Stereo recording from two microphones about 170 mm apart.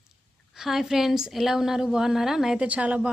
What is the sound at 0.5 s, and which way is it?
A woman's voice, centre (ahead or behind).